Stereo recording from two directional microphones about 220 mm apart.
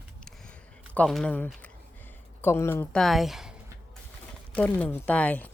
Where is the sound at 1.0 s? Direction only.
5° left (ahead or behind).